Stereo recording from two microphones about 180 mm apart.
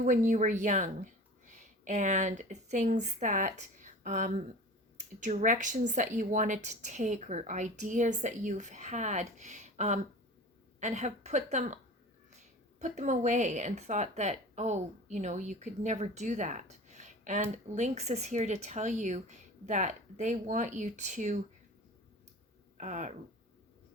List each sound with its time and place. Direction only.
0.0 s a woman's voice: 45° right (ahead or behind)
12.8 s speech: 40° right (ahead or behind)
22.8 s a woman's voice: 40° right (ahead or behind)